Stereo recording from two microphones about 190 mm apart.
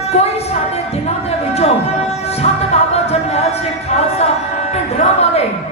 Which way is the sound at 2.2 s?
35° left (ahead or behind).